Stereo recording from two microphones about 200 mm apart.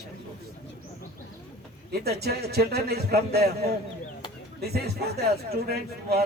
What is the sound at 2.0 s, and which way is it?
A man's voice, 50° right (ahead or behind).